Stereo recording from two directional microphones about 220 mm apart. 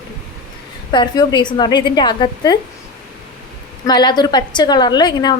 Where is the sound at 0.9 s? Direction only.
20° left (ahead or behind).